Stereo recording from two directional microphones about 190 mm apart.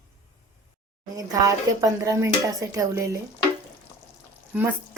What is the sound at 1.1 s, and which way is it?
Speech, 15° right (ahead or behind).